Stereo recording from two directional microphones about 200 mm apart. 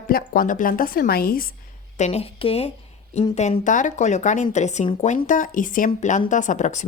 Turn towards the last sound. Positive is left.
turn(degrees=35)  # may be behind; listen again after turning